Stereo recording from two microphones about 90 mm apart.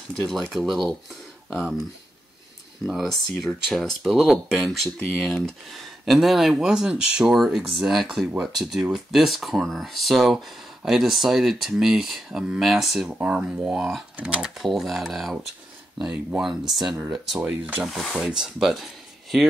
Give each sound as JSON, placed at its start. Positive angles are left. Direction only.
{"t": 0.1, "sound": "speech", "side_deg": 0}
{"t": 2.9, "sound": "speech", "side_deg": 0}
{"t": 17.4, "sound": "speech", "side_deg": -20}
{"t": 17.8, "sound": "speech", "side_deg": 0}